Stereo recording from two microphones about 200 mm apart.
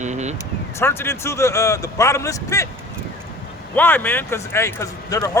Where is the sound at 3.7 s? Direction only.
10° left (ahead or behind).